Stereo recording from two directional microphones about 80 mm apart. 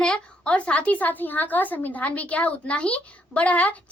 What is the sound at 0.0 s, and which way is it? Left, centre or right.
A woman's voice, centre.